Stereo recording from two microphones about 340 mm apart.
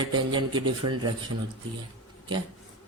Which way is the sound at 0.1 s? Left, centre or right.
Centre.